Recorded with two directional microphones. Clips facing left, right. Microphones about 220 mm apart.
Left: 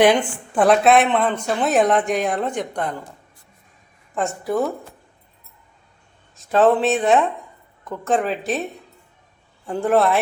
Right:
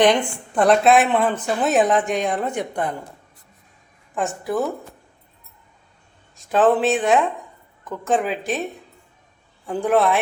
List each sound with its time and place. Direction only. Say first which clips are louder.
0.0 s a woman's voice: left 1 dB; 5° left (ahead or behind)
4.4 s a woman's voice: left 2 dB; centre (ahead or behind)
6.3 s a woman's voice: left 1 dB; centre (ahead or behind)